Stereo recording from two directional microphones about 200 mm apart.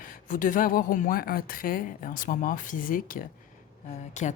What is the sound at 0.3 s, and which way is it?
Speech, 40° left (ahead or behind).